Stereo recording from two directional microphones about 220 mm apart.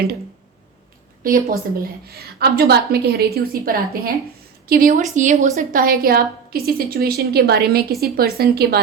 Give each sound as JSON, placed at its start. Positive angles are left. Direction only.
{"t": 1.2, "sound": "a woman's voice", "side_deg": -40}